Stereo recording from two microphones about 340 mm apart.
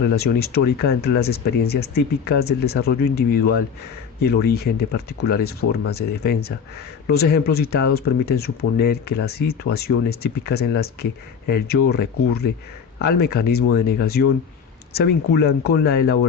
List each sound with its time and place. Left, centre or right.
0.0 s speech: left